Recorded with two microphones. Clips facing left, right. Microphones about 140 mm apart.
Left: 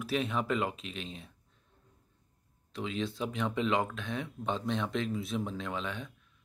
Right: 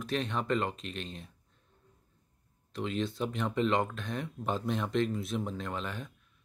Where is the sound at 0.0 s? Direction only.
5° left (ahead or behind).